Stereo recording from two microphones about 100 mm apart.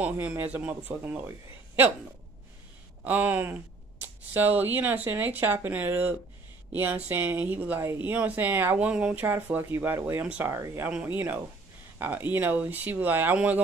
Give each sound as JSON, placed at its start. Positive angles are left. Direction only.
{"t": 0.0, "sound": "speech", "side_deg": -15}
{"t": 3.0, "sound": "speech", "side_deg": -15}
{"t": 10.5, "sound": "speech", "side_deg": -30}